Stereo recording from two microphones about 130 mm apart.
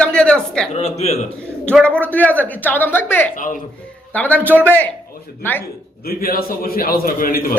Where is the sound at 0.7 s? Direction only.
60° left (ahead or behind).